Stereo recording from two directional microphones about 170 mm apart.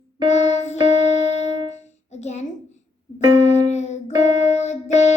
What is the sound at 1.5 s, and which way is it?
Music, 25° right (ahead or behind).